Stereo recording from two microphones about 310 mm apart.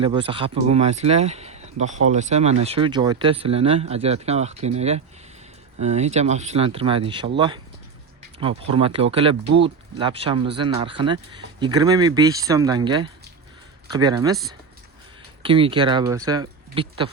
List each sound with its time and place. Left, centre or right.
0.0 s speech: centre
15.4 s speech: centre